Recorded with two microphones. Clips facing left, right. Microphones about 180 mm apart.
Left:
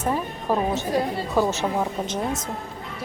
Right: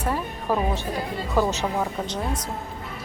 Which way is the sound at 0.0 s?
15° left (ahead or behind).